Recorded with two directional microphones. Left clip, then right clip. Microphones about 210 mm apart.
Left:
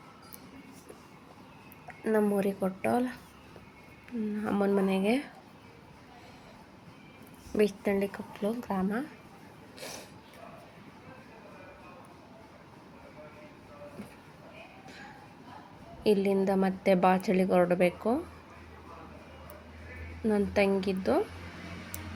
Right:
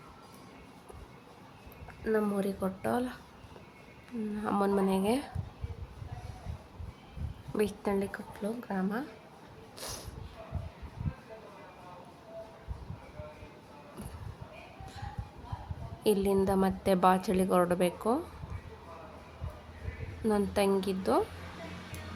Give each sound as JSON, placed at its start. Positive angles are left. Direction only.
{"t": 2.0, "sound": "speech", "side_deg": 20}
{"t": 2.4, "sound": "a woman's voice", "side_deg": 5}
{"t": 4.4, "sound": "a woman's voice", "side_deg": 0}
{"t": 7.5, "sound": "a woman's voice", "side_deg": 5}
{"t": 9.8, "sound": "a sound", "side_deg": -5}
{"t": 16.0, "sound": "a woman's voice", "side_deg": 0}
{"t": 20.2, "sound": "a woman's voice", "side_deg": 0}